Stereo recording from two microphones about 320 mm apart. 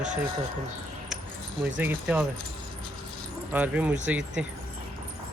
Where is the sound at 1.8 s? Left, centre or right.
Centre.